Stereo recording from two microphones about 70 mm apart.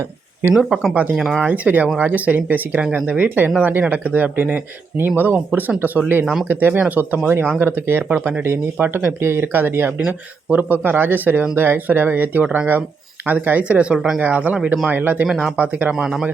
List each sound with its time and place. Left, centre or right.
0.5 s speech: centre
1.5 s speech: right
6.2 s speech: centre
6.5 s speech: right
7.6 s speech: right
15.3 s speech: centre
15.5 s speech: right
16.0 s a man's voice: centre